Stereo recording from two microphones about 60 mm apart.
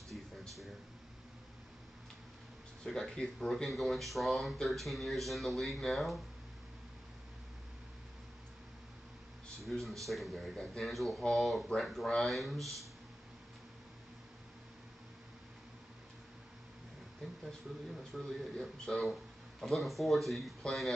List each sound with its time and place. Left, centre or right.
0.1 s a sound: centre
2.8 s speech: centre
9.7 s speech: centre
17.9 s speech: centre